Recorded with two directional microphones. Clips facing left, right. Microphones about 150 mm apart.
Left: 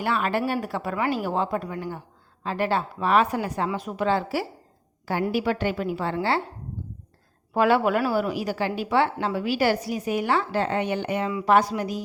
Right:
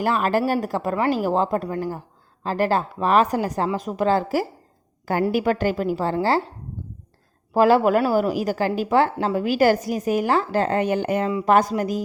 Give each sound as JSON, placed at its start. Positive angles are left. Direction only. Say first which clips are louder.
{"t": 0.0, "sound": "speech", "louder": "right 4 dB", "side_deg": -40}
{"t": 7.5, "sound": "a woman's voice", "louder": "right 4 dB", "side_deg": -35}